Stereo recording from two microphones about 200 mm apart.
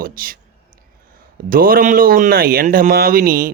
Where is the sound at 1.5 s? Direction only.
45° right (ahead or behind).